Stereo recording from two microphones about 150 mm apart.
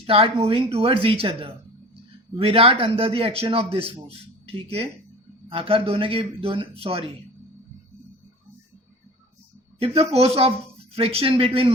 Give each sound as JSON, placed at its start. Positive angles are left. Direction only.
{"t": 0.0, "sound": "a man's voice", "side_deg": -40}
{"t": 9.8, "sound": "a man's voice", "side_deg": -40}